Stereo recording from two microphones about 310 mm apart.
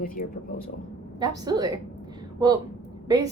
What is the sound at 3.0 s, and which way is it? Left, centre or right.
Speech, centre.